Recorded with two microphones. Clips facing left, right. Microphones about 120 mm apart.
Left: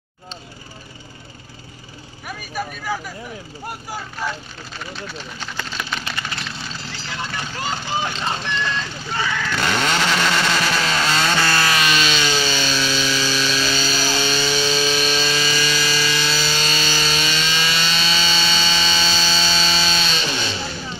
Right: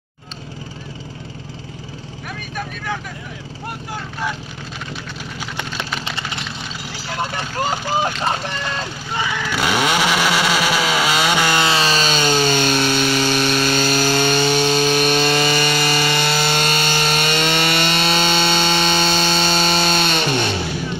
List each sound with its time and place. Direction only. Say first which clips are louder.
2.5 s speech: left 1 dB; 5° left (ahead or behind)
6.0 s vehicle: right 2 dB; 25° right (ahead or behind)
7.1 s vehicle: right 5 dB; 50° right (ahead or behind)
8.0 s speech: right 4 dB; 45° right (ahead or behind)
9.1 s chainsaw: right 1 dB; 15° right (ahead or behind); by 20.7 s 55° right (ahead or behind)